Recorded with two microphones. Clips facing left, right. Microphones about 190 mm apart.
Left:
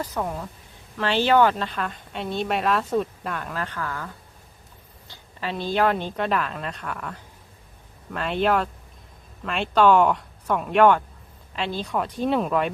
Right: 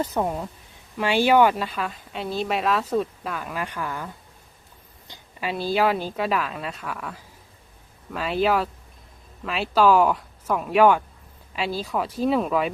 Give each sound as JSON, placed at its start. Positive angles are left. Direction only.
{"t": 0.0, "sound": "a woman's voice", "side_deg": -20}